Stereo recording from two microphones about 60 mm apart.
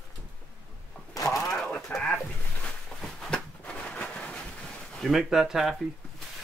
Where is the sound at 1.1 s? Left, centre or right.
Left.